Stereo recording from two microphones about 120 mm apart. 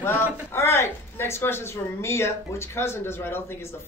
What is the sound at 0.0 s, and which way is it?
Speech, 20° left (ahead or behind).